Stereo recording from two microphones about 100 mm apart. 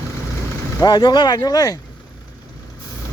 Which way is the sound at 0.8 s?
50° left (ahead or behind).